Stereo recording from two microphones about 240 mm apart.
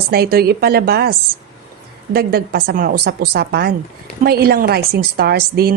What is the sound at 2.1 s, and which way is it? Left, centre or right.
A woman's voice, right.